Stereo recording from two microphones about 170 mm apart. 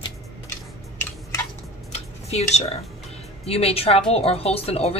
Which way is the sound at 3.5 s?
35° left (ahead or behind).